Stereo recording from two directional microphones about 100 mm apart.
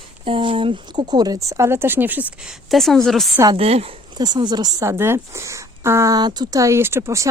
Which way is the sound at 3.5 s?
90° right.